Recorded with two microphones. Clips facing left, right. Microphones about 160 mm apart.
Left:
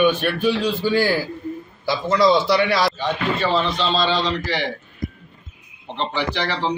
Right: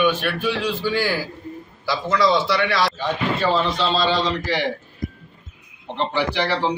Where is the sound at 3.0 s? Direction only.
10° right (ahead or behind).